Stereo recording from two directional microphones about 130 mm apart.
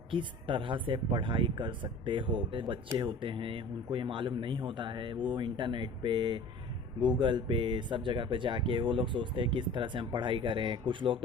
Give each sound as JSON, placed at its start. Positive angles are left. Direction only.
{"t": 0.1, "sound": "speech", "side_deg": -40}